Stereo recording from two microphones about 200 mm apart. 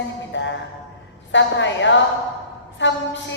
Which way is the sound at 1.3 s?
65° left (ahead or behind).